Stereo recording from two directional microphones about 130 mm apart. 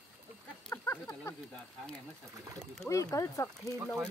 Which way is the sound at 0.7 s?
20° left (ahead or behind).